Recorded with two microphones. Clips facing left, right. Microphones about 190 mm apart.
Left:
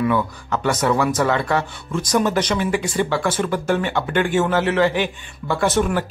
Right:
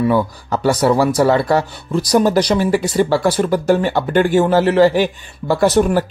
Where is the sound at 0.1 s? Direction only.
35° right (ahead or behind).